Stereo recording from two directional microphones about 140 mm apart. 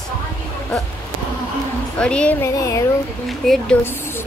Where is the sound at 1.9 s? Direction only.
5° left (ahead or behind).